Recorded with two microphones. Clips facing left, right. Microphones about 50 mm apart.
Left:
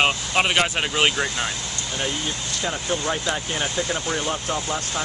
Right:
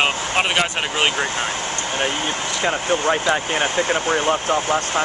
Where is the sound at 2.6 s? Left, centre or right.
Right.